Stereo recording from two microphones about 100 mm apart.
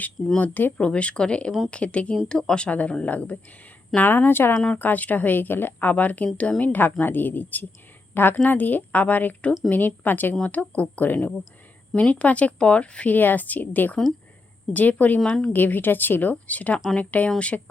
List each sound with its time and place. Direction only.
0.3 s a woman's voice: 15° left (ahead or behind)
4.5 s a woman's voice: 10° left (ahead or behind)